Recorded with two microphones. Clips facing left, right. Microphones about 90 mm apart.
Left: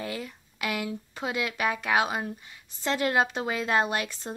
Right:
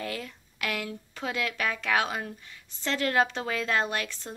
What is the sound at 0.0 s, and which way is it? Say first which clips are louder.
A woman's voice: left 1 dB; 15° left (ahead or behind).